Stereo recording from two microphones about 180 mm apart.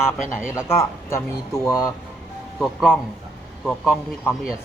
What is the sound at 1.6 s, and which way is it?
Speech, 15° left (ahead or behind).